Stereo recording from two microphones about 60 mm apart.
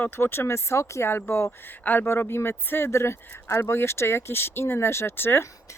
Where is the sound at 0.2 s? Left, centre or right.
Left.